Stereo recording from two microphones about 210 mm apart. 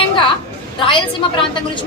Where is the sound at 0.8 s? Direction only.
25° left (ahead or behind).